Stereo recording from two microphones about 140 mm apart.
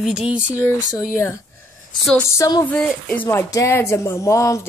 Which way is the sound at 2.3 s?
25° left (ahead or behind).